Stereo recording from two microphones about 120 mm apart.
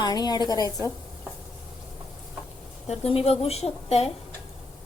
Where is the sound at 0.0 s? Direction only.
35° left (ahead or behind).